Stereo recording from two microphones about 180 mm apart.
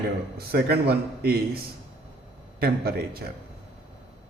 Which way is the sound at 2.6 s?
60° right (ahead or behind).